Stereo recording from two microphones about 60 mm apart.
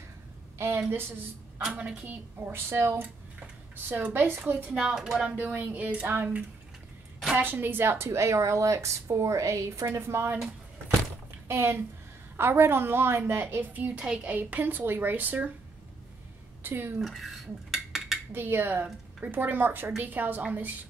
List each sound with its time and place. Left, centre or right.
0.6 s a woman's voice: right
1.7 s speech: right
2.4 s speech: right
3.0 s speech: right
4.6 s speech: centre
5.3 s speech: right
9.8 s speech: right
11.4 s a woman's voice: right; by 14.3 s centre
14.3 s a woman's voice: right
16.6 s a woman's voice: right
17.0 s dishes: centre
18.3 s a woman's voice: right